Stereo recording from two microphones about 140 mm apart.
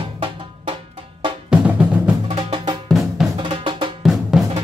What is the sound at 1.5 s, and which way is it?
Drum, 10° right (ahead or behind).